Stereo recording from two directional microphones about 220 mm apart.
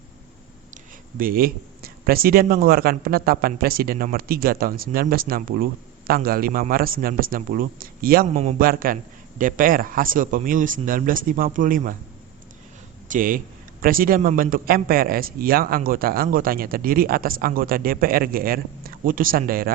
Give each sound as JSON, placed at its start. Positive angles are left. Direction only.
{"t": 1.2, "sound": "speech", "side_deg": -40}
{"t": 13.1, "sound": "speech", "side_deg": -40}